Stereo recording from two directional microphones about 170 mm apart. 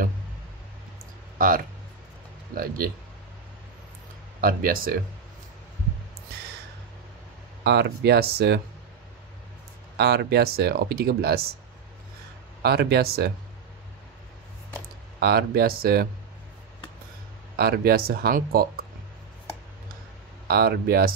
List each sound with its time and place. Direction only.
1.4 s speech: 55° right (ahead or behind)
4.4 s speech: 60° right (ahead or behind)
7.6 s speech: 75° right (ahead or behind)
9.9 s speech: 70° right (ahead or behind)
12.6 s speech: 70° right (ahead or behind)
15.1 s speech: 65° right (ahead or behind)
17.6 s speech: 65° right (ahead or behind)
20.4 s speech: 65° right (ahead or behind)